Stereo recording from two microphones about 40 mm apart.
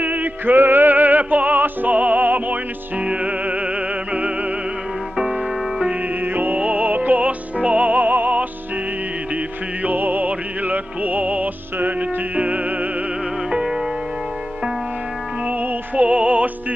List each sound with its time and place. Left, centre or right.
0.0 s music: right
0.6 s music: right
5.1 s music: centre
6.2 s music: right
6.6 s music: right
9.8 s music: right
13.5 s music: centre
15.6 s music: right
16.1 s music: right